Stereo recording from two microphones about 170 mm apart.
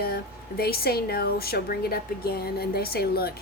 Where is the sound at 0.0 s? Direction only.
65° left (ahead or behind).